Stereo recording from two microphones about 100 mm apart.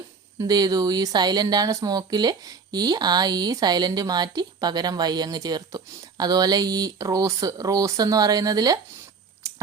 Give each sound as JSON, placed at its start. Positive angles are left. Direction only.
{"t": 0.3, "sound": "speech", "side_deg": -40}